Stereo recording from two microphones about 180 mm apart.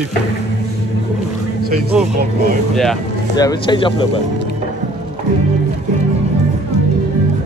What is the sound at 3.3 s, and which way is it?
Speech, 20° left (ahead or behind).